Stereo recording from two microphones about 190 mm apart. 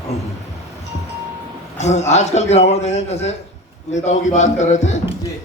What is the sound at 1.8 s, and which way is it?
A man's voice, 35° left (ahead or behind).